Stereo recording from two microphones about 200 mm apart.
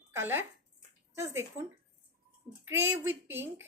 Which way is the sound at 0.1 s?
10° right (ahead or behind).